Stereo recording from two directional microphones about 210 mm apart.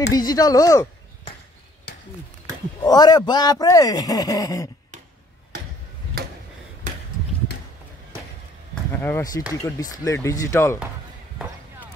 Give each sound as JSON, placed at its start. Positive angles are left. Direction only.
{"t": 0.1, "sound": "speech", "side_deg": 15}
{"t": 2.8, "sound": "a man's voice", "side_deg": 20}
{"t": 9.0, "sound": "a man's voice", "side_deg": 15}